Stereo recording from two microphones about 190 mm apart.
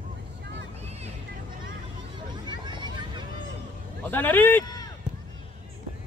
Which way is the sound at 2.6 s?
25° right (ahead or behind).